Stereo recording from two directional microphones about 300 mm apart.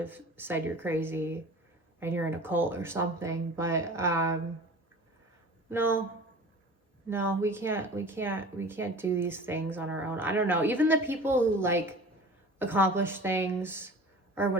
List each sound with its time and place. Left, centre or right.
0.0 s speech: centre
5.6 s speech: centre
7.1 s speech: centre